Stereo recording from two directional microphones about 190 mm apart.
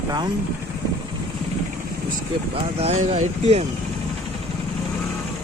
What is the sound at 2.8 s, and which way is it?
Speech, 30° right (ahead or behind).